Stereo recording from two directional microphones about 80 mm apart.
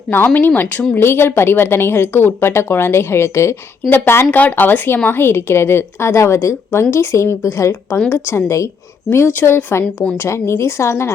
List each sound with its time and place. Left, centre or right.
0.3 s speech: left
9.0 s speech: left
9.8 s a woman's voice: centre
10.2 s speech: left